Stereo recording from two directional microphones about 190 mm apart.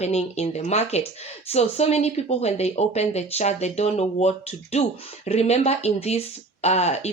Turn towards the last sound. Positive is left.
turn(degrees=35)  # may be behind; listen again after turning